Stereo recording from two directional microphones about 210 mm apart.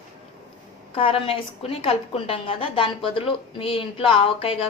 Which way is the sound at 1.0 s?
25° left (ahead or behind).